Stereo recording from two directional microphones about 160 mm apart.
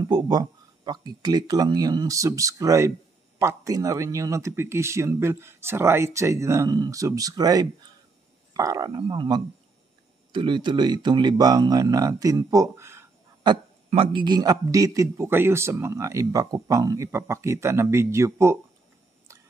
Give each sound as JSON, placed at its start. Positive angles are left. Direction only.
{"t": 0.0, "sound": "speech", "side_deg": -25}
{"t": 13.8, "sound": "a man's voice", "side_deg": -30}